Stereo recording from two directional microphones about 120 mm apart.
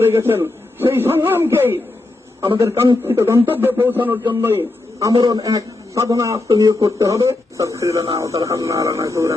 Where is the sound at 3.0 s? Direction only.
20° right (ahead or behind).